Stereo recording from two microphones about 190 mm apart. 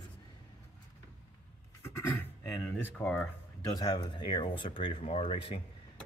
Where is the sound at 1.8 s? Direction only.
15° left (ahead or behind).